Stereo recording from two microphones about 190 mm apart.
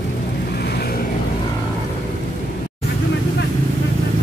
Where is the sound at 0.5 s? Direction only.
55° left (ahead or behind).